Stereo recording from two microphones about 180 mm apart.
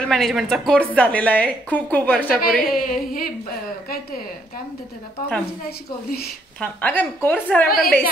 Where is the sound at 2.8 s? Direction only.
50° left (ahead or behind).